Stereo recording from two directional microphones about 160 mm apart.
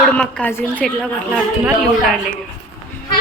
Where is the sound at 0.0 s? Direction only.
5° left (ahead or behind).